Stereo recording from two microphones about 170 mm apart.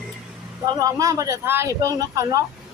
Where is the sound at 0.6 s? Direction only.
20° right (ahead or behind).